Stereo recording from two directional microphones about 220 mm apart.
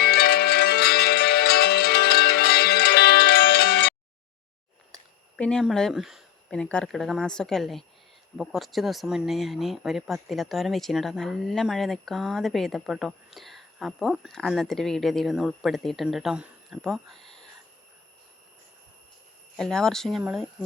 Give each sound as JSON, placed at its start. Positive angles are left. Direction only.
{"t": 0.0, "sound": "music", "side_deg": 45}
{"t": 5.4, "sound": "speech", "side_deg": 5}
{"t": 19.5, "sound": "speech", "side_deg": 0}